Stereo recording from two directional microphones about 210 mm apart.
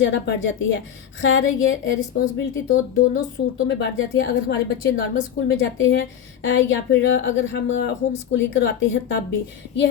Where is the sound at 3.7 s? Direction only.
55° left (ahead or behind).